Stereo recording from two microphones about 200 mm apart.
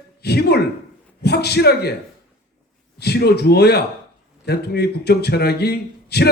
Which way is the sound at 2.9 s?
55° left (ahead or behind).